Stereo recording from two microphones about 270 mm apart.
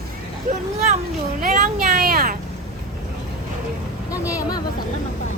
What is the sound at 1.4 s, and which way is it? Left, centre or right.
Speech, right.